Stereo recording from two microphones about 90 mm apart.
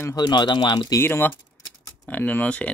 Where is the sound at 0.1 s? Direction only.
50° left (ahead or behind).